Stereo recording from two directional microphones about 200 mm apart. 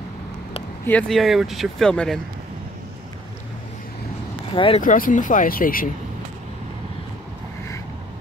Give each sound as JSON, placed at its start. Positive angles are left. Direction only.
{"t": 0.8, "sound": "speech", "side_deg": 5}
{"t": 4.6, "sound": "speech", "side_deg": 25}
{"t": 4.8, "sound": "speech", "side_deg": 40}